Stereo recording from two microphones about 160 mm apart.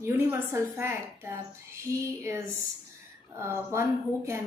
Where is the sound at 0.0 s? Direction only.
15° right (ahead or behind).